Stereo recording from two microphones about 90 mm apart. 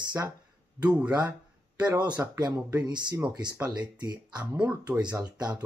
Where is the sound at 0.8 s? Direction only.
15° right (ahead or behind).